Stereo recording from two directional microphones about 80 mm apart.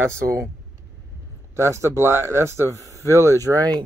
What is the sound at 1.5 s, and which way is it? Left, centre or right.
Speech, right.